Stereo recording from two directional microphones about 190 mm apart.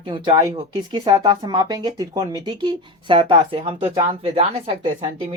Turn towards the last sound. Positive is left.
turn(degrees=-30)  # may be behind; listen again after turning